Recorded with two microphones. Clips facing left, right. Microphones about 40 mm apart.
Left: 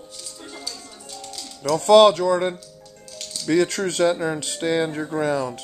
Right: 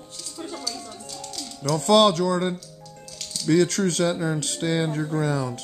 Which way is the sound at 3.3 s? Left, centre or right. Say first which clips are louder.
Even; centre.